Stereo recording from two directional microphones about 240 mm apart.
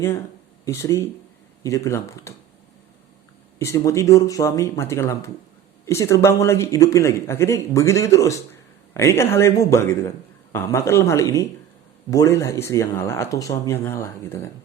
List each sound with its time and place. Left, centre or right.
0.6 s a man's voice: centre
3.6 s a man's voice: centre